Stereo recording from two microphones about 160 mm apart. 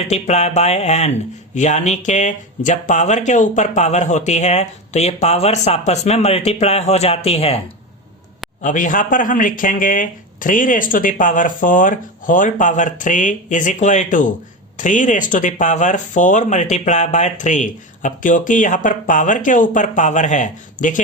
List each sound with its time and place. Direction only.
0.1 s speech: 45° left (ahead or behind)
8.6 s speech: 55° left (ahead or behind)